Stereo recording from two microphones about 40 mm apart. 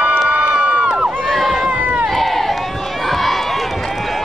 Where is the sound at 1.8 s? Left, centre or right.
Right.